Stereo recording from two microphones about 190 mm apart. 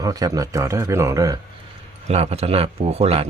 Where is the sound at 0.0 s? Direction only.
20° right (ahead or behind).